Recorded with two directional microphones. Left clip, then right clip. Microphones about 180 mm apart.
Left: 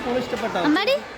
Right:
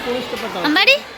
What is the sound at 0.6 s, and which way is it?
Speech, 10° left (ahead or behind).